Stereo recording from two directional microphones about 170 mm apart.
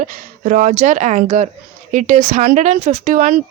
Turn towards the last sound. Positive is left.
turn(degrees=-50)  # may be behind; listen again after turning